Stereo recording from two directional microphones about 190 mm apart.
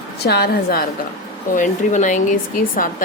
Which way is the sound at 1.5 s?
40° left (ahead or behind).